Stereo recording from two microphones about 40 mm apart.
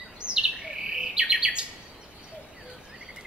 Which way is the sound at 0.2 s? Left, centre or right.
Centre.